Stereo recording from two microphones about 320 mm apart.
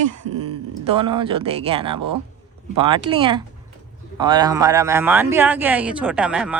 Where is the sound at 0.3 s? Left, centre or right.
Right.